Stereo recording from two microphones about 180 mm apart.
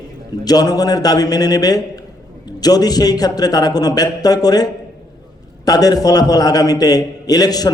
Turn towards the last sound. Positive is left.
turn(degrees=20)  # may be behind; listen again after turning